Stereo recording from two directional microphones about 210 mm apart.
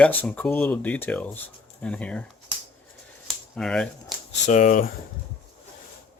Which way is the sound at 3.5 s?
5° left (ahead or behind).